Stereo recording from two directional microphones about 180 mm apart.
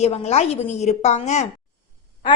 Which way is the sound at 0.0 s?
35° left (ahead or behind).